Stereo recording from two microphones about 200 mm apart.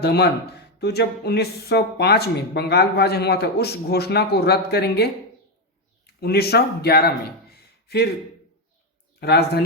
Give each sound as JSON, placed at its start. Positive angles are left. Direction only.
{"t": 0.0, "sound": "speech", "side_deg": 55}
{"t": 6.1, "sound": "speech", "side_deg": 50}
{"t": 9.2, "sound": "speech", "side_deg": 55}